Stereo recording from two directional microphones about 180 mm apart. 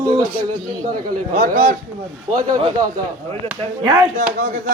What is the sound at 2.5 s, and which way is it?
Speech, 25° right (ahead or behind).